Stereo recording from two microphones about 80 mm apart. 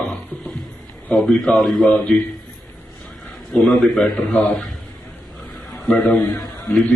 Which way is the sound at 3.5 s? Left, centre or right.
Centre.